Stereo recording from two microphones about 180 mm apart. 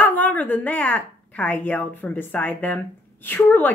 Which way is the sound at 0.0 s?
10° left (ahead or behind).